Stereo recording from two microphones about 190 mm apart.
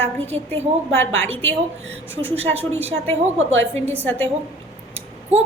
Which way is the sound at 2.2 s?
10° left (ahead or behind).